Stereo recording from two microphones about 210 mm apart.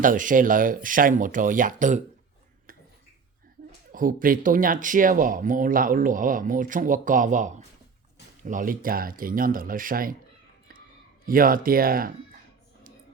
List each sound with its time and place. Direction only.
0.0 s speech: 40° right (ahead or behind)
3.9 s speech: 40° right (ahead or behind)
11.3 s speech: 40° right (ahead or behind)